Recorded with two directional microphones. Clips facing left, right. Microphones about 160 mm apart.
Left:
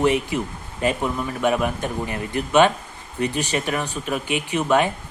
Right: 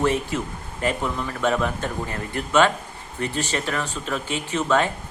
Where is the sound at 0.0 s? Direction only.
15° left (ahead or behind).